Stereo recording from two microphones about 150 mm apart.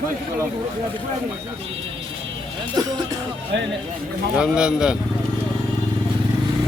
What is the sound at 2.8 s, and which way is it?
Speech, 25° right (ahead or behind).